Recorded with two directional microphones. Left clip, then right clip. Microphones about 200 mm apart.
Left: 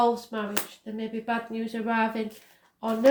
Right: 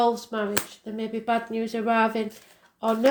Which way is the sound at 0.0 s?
35° right (ahead or behind).